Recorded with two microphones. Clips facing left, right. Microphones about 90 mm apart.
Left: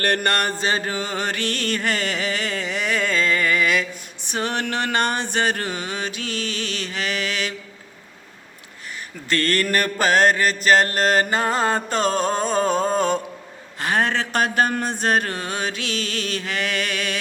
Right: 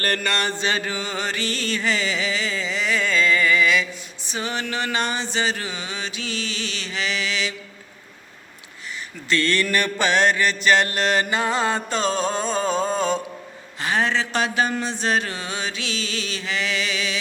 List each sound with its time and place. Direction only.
0.0 s mantra: 55° left (ahead or behind)
0.7 s music: 40° left (ahead or behind)
4.3 s mantra: 60° left (ahead or behind)
9.3 s mantra: 45° left (ahead or behind)